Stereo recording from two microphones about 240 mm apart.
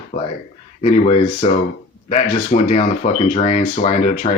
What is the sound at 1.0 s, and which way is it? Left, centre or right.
Speech, left.